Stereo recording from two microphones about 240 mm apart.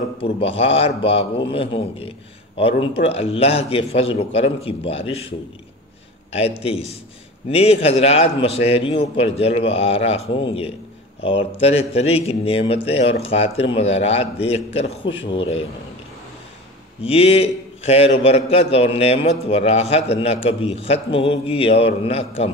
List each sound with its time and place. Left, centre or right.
0.2 s speech: left
6.6 s speech: left
11.6 s speech: left
17.0 s speech: left